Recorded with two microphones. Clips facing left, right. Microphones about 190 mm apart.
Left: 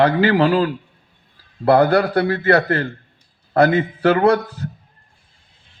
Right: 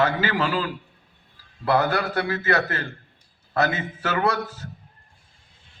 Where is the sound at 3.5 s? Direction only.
55° left (ahead or behind).